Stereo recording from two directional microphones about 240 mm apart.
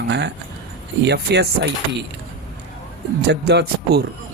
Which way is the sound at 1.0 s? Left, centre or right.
Right.